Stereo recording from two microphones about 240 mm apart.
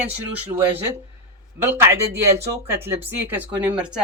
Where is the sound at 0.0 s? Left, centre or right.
Centre.